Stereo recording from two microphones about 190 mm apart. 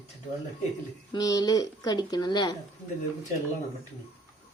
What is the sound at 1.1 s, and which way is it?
Speech, 20° left (ahead or behind).